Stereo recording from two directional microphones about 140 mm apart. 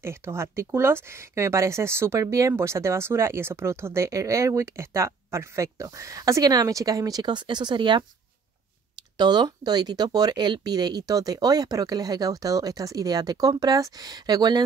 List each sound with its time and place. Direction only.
0.0 s speech: 20° right (ahead or behind); by 8.0 s 35° right (ahead or behind)
9.2 s speech: 30° right (ahead or behind)